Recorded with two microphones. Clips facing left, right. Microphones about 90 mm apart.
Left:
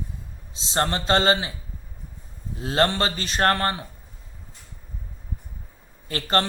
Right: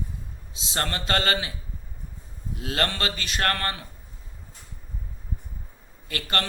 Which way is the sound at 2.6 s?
30° left (ahead or behind).